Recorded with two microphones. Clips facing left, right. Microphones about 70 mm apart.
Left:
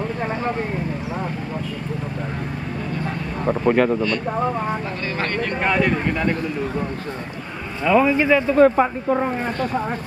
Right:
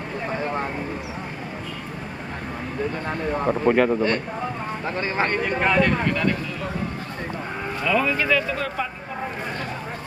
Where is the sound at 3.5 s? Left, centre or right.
Centre.